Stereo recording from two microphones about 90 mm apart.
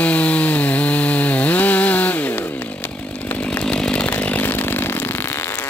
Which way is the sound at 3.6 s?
10° left (ahead or behind).